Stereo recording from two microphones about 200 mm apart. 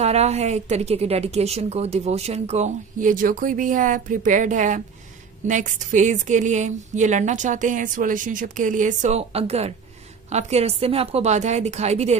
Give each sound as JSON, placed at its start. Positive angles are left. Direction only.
{"t": 0.0, "sound": "a woman's voice", "side_deg": -35}